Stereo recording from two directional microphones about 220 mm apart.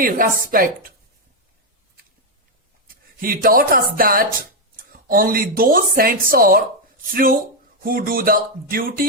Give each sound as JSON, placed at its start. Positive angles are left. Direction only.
{"t": 0.0, "sound": "speech", "side_deg": -40}
{"t": 2.8, "sound": "speech", "side_deg": -40}